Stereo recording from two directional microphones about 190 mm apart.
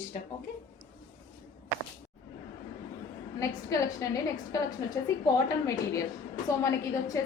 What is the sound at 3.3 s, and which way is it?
A woman's voice, 15° left (ahead or behind).